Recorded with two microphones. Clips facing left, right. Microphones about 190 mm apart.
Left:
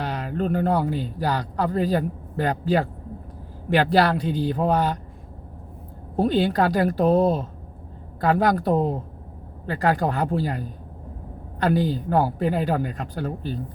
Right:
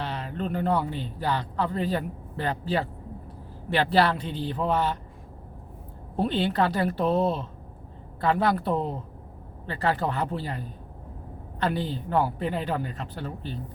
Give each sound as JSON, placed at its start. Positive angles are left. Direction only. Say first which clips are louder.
{"t": 0.0, "sound": "speech", "louder": "left 5 dB", "side_deg": 40}
{"t": 6.1, "sound": "speech", "louder": "left 4 dB", "side_deg": 40}
{"t": 11.6, "sound": "speech", "louder": "left 6 dB", "side_deg": 40}